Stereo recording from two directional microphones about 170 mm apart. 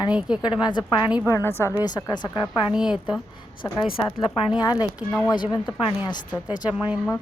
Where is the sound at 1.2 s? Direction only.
15° left (ahead or behind).